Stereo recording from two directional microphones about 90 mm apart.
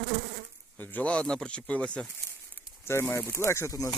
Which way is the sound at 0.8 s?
20° left (ahead or behind).